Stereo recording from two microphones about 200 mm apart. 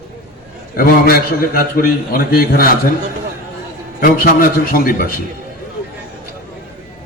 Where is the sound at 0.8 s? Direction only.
45° left (ahead or behind).